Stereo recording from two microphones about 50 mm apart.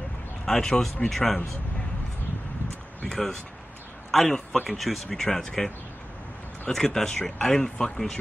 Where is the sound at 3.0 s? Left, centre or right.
Centre.